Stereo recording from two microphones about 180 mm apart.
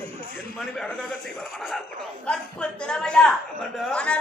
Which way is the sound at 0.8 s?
5° left (ahead or behind).